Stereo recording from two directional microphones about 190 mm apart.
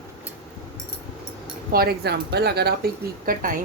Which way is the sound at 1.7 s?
55° right (ahead or behind).